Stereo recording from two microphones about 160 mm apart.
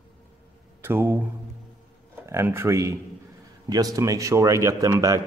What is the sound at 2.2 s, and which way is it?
A man's voice, 15° right (ahead or behind).